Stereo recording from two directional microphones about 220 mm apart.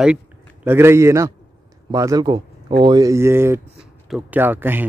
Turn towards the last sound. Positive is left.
turn(degrees=-10)  # may be behind; listen again after turning